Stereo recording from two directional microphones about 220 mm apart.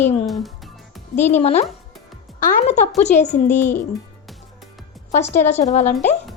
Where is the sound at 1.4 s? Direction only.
30° left (ahead or behind).